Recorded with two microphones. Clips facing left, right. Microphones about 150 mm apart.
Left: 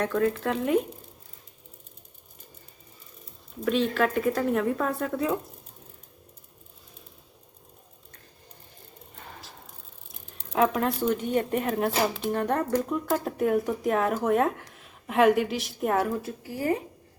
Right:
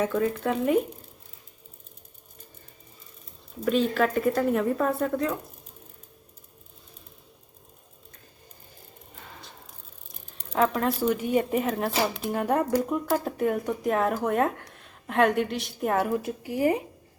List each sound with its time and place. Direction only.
0.0 s speech: 5° right (ahead or behind)
3.6 s speech: centre (ahead or behind)
10.1 s a woman's voice: 5° left (ahead or behind)
16.2 s speech: 15° right (ahead or behind)